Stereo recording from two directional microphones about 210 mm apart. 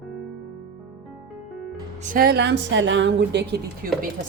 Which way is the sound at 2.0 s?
40° right (ahead or behind).